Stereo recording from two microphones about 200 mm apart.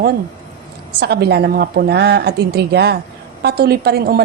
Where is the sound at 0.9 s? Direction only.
55° right (ahead or behind).